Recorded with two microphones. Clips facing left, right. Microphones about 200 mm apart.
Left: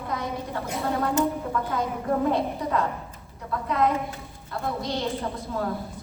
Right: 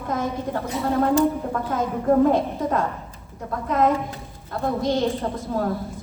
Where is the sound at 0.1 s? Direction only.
45° right (ahead or behind).